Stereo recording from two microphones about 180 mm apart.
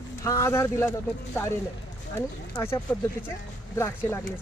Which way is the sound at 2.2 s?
15° left (ahead or behind).